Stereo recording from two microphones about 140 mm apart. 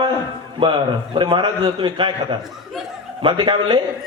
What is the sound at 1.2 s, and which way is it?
A man's voice, 35° right (ahead or behind).